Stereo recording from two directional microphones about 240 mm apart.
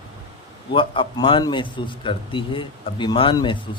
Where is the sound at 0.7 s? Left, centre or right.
Left.